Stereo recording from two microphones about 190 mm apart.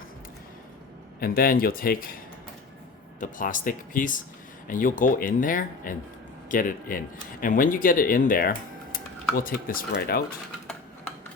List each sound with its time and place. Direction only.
1.2 s speech: 50° left (ahead or behind)